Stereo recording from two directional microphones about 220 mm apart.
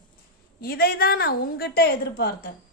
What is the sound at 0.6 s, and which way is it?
A woman's voice, 45° left (ahead or behind).